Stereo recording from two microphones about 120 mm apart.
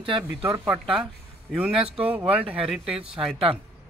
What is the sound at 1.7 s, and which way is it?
Speech, 50° right (ahead or behind).